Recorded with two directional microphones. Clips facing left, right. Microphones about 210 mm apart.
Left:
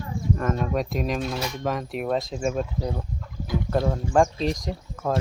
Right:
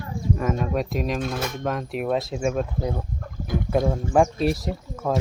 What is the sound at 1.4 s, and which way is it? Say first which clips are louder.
Speech: right 1 dB; 50° right (ahead or behind).